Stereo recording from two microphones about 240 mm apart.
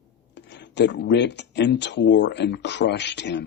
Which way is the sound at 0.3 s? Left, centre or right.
Left.